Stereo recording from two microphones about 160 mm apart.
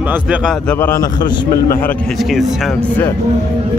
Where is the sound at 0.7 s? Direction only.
20° left (ahead or behind).